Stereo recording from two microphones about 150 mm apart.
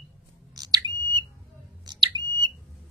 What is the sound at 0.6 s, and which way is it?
Smoke detector, 30° right (ahead or behind).